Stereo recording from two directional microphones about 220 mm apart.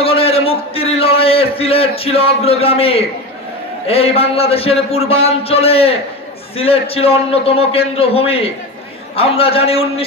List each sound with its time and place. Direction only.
0.0 s a man's voice: 25° left (ahead or behind)